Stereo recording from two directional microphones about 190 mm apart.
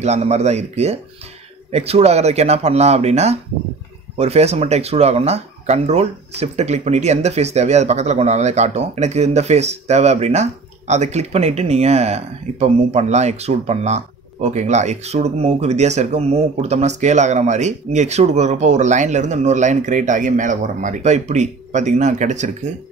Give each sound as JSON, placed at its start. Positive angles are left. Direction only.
{"t": 0.0, "sound": "speech", "side_deg": -35}